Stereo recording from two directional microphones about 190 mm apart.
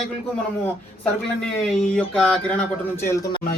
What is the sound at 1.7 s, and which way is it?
Speech, 5° left (ahead or behind).